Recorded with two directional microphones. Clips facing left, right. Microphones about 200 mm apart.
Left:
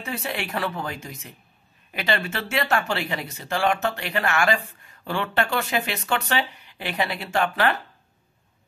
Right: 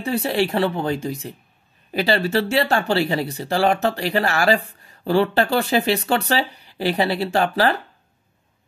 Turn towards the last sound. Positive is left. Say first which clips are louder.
# right 4 dB
turn(degrees=-35)  # may be behind; listen again after turning